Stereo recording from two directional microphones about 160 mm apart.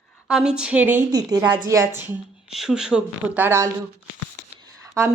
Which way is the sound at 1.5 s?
20° right (ahead or behind).